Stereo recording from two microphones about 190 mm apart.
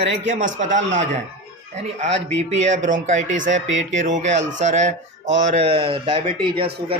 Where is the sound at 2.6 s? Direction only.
40° right (ahead or behind).